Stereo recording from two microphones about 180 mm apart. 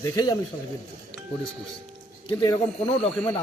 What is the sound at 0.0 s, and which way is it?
Speech, 20° left (ahead or behind).